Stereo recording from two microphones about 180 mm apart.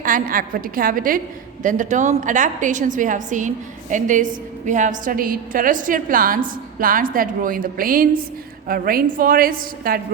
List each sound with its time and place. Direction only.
0.0 s a woman's voice: 50° right (ahead or behind)